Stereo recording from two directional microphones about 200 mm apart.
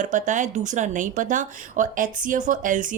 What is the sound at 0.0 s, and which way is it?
Speech, 40° right (ahead or behind).